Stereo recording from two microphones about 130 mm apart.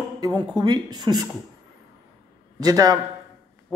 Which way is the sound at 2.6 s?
30° right (ahead or behind).